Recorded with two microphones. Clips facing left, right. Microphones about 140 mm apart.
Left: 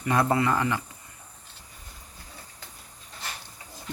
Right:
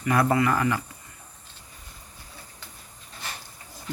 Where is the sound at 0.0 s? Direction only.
20° left (ahead or behind).